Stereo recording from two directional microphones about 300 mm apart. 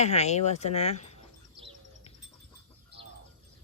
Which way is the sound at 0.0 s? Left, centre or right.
Left.